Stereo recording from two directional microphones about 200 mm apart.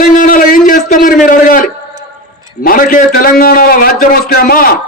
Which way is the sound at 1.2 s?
45° left (ahead or behind).